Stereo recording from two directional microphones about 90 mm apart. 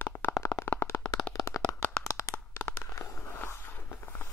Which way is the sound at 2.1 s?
35° left (ahead or behind).